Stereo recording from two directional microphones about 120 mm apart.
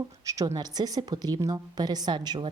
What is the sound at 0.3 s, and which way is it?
A woman's voice, 30° right (ahead or behind).